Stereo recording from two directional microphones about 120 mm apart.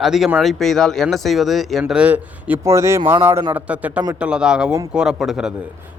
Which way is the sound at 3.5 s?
15° right (ahead or behind).